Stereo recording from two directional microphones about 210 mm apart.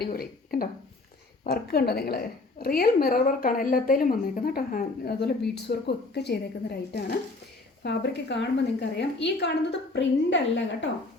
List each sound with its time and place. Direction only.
0.0 s a woman's voice: 45° left (ahead or behind)